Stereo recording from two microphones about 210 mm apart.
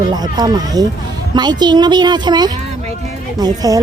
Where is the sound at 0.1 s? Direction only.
20° right (ahead or behind).